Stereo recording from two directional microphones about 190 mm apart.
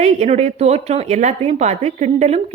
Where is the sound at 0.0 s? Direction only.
35° right (ahead or behind).